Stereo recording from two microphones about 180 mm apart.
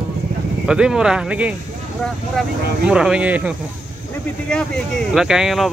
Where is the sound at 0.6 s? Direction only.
5° right (ahead or behind).